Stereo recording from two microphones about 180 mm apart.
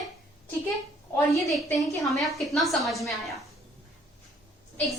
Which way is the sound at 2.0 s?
Centre (ahead or behind).